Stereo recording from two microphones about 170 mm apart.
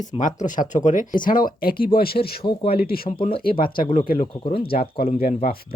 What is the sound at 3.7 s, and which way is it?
Speech, 30° left (ahead or behind).